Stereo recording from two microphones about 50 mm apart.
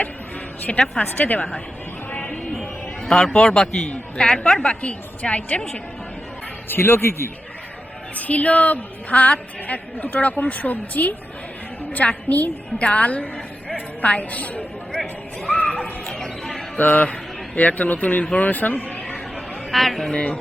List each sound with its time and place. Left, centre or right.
0.7 s a woman's voice: left
1.0 s speech: left
2.1 s a sound: centre
3.3 s a man's voice: centre
6.7 s speech: left
8.1 s a woman's voice: left
14.9 s a sound: centre
16.1 s a sound: centre
16.7 s a man's voice: left
18.9 s a sound: centre
19.7 s a man's voice: centre
20.1 s a woman's voice: left